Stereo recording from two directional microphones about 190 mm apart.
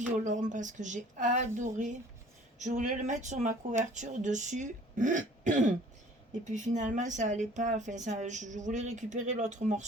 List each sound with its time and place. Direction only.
0.1 s speech: 40° right (ahead or behind)